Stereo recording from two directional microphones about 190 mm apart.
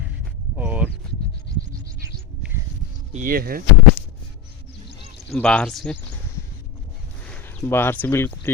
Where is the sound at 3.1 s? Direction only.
45° right (ahead or behind).